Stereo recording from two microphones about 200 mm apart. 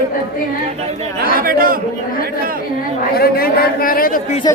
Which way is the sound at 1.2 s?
45° right (ahead or behind).